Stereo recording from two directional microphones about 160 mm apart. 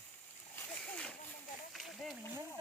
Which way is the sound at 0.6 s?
10° left (ahead or behind).